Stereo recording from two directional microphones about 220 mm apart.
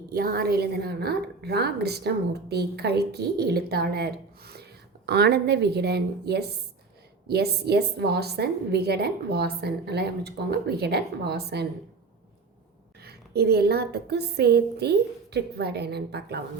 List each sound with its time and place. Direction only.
0.1 s a woman's voice: 40° right (ahead or behind)
13.0 s a woman's voice: 45° right (ahead or behind)